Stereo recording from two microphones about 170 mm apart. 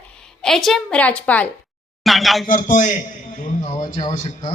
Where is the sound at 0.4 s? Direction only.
Centre (ahead or behind).